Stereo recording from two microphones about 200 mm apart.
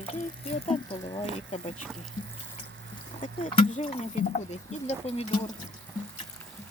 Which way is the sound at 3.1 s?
30° left (ahead or behind).